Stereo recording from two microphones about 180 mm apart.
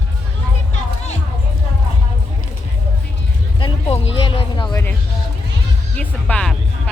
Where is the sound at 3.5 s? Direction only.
30° left (ahead or behind).